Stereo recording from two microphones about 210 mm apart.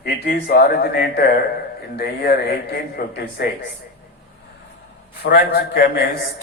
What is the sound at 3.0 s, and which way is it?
Speech, 50° left (ahead or behind).